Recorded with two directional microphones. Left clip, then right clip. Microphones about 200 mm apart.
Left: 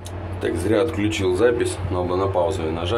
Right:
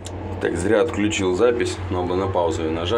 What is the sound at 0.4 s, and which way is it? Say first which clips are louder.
Speech: right 1 dB; 5° right (ahead or behind).